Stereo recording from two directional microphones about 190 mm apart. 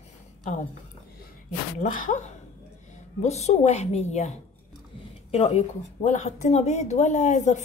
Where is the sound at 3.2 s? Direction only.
35° left (ahead or behind).